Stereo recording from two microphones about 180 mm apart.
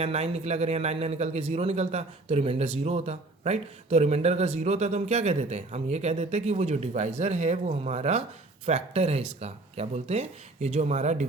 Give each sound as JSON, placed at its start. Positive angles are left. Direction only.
{"t": 0.0, "sound": "a man's voice", "side_deg": -35}